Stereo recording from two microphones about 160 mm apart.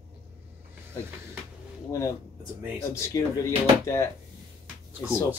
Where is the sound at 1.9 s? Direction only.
20° left (ahead or behind).